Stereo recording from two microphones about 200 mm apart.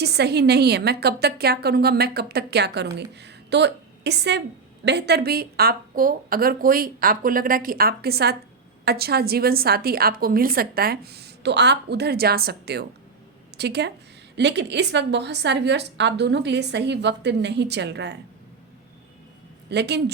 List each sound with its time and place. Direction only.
0.0 s a woman's voice: 55° right (ahead or behind)
19.7 s a woman's voice: 55° right (ahead or behind)